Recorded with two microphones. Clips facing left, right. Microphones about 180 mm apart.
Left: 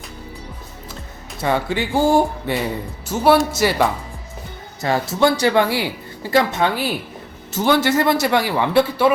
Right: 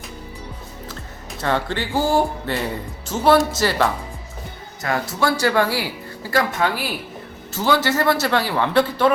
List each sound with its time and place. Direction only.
1.4 s a man's voice: 10° left (ahead or behind)
4.8 s a man's voice: 25° left (ahead or behind)